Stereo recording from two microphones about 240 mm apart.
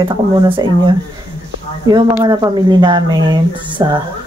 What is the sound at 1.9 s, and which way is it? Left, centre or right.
Speech, centre.